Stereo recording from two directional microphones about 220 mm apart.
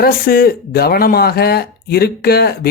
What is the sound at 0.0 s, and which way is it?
Speech, 40° left (ahead or behind).